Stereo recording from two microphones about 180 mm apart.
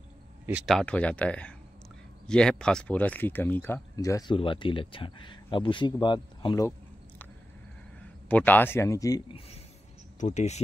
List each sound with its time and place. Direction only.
0.5 s speech: 5° right (ahead or behind); by 6.7 s 25° left (ahead or behind)
8.3 s speech: 10° left (ahead or behind)
10.2 s speech: 40° left (ahead or behind)